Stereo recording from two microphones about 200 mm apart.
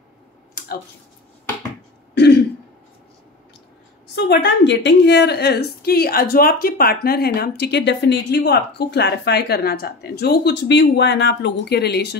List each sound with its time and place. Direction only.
2.1 s throat clearing: 60° left (ahead or behind)
4.1 s a woman's voice: 55° left (ahead or behind)